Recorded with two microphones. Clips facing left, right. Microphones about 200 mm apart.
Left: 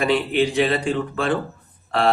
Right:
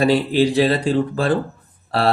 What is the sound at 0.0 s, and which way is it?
Speech, 35° right (ahead or behind).